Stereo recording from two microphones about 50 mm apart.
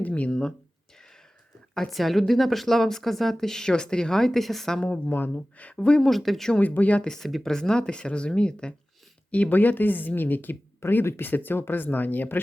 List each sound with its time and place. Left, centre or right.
0.0 s speech: left
0.3 s speech: centre
1.9 s a woman's voice: centre
4.8 s speech: left
5.1 s speech: left
5.7 s speech: centre
6.0 s speech: centre
6.6 s speech: left
7.0 s a woman's voice: centre
7.3 s speech: centre
7.5 s a woman's voice: centre
9.3 s speech: left